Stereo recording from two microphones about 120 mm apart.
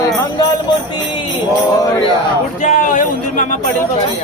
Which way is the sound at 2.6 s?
90° left.